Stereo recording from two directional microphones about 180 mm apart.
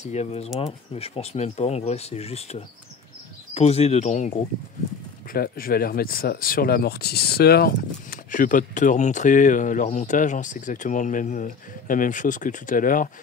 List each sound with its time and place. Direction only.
0.0 s speech: 40° left (ahead or behind)
5.3 s speech: 55° left (ahead or behind)